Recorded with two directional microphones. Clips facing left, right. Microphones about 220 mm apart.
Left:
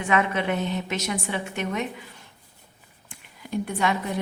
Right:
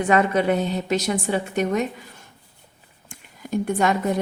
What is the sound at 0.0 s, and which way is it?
A woman's voice, 40° right (ahead or behind).